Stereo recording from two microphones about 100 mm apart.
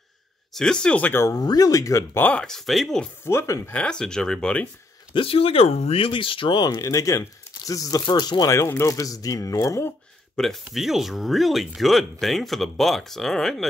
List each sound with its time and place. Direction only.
0.5 s speech: 5° left (ahead or behind)
1.2 s speech: 40° left (ahead or behind)
2.1 s speech: 15° left (ahead or behind)
3.3 s speech: 30° left (ahead or behind)
3.7 s speech: 10° left (ahead or behind)
5.1 s speech: 70° left (ahead or behind); by 6.7 s 55° left (ahead or behind)
6.7 s speech: 35° left (ahead or behind)
8.0 s speech: 45° left (ahead or behind)
8.5 s speech: 30° left (ahead or behind)
10.3 s speech: centre (ahead or behind)